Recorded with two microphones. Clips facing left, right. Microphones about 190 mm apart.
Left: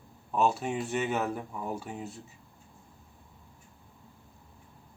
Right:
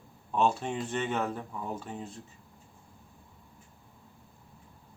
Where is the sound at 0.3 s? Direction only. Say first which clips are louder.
Even; 5° left (ahead or behind).